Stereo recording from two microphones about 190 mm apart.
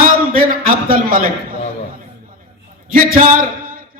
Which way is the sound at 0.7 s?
50° right (ahead or behind).